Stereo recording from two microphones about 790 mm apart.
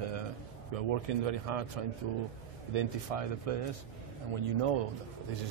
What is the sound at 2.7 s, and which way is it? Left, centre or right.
Speech, right.